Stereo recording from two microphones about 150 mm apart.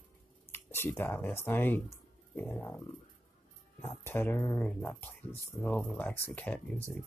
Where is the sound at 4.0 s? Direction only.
15° left (ahead or behind).